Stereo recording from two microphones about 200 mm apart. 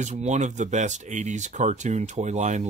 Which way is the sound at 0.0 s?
35° right (ahead or behind).